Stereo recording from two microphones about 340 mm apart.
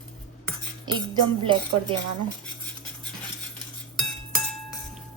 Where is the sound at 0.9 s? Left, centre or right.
Centre.